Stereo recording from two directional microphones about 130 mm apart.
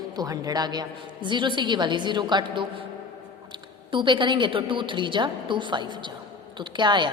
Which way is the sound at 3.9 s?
40° right (ahead or behind).